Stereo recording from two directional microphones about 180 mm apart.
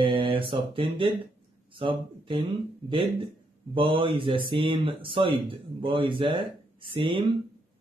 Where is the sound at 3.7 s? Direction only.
30° right (ahead or behind).